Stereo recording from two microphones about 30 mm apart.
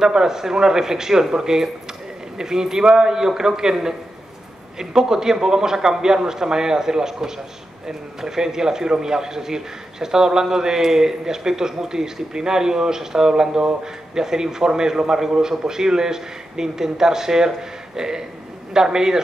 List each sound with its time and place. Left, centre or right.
0.0 s speech: right